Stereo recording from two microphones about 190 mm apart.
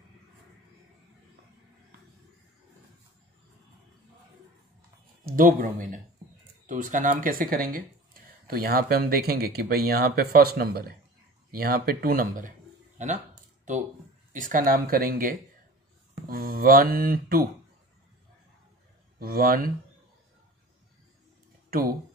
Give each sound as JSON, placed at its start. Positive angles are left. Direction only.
{"t": 5.2, "sound": "speech", "side_deg": -45}
{"t": 14.3, "sound": "speech", "side_deg": -45}
{"t": 19.1, "sound": "speech", "side_deg": -50}
{"t": 21.6, "sound": "speech", "side_deg": -50}